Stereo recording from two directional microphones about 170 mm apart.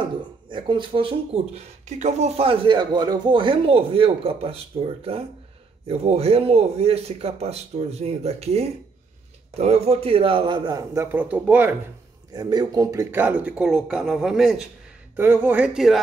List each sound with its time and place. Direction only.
0.0 s a man's voice: 30° right (ahead or behind); by 11.7 s 10° right (ahead or behind)
12.3 s speech: 25° right (ahead or behind); by 16.0 s 5° right (ahead or behind)